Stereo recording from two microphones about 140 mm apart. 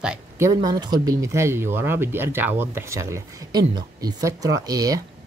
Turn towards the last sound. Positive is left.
turn(degrees=-25)  # may be behind; listen again after turning